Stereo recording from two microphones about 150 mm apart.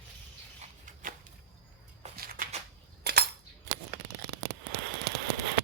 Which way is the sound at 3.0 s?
90° right.